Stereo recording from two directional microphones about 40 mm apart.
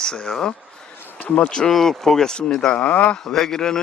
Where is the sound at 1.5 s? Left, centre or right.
Centre.